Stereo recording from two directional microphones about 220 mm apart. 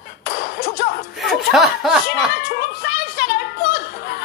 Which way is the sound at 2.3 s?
45° left (ahead or behind).